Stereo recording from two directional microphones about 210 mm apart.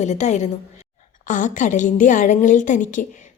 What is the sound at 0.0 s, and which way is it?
A woman's voice, 35° left (ahead or behind).